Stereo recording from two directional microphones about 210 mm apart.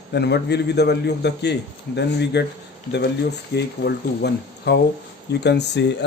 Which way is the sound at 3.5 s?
50° left (ahead or behind).